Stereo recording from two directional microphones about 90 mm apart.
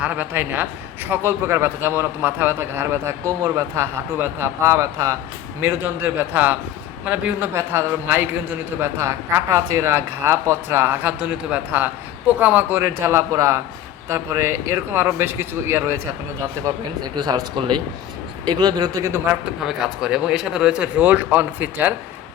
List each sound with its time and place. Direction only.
0.0 s a man's voice: 15° right (ahead or behind); by 5.1 s 35° right (ahead or behind)
5.5 s a man's voice: 25° right (ahead or behind)
11.2 s a man's voice: 10° right (ahead or behind)
12.8 s a man's voice: 30° right (ahead or behind)
16.6 s a man's voice: 50° right (ahead or behind)
18.4 s a man's voice: 45° right (ahead or behind)
19.6 s speech: 5° right (ahead or behind)